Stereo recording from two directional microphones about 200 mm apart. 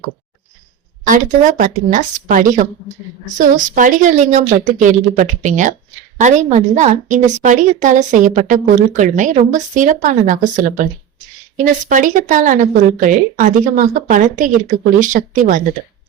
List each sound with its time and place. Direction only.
1.0 s a woman's voice: 40° right (ahead or behind)